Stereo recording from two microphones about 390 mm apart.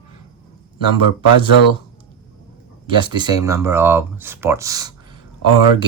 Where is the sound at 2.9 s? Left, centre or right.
Centre.